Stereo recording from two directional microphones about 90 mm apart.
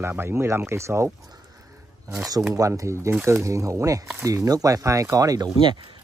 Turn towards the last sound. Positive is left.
turn(degrees=-65)  # may be behind; listen again after turning